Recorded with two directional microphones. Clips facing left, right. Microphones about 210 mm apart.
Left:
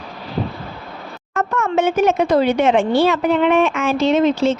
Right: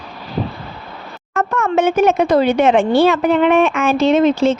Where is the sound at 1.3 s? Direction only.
55° right (ahead or behind).